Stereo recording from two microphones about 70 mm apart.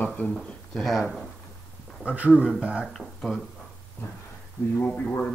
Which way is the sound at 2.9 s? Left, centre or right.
Centre.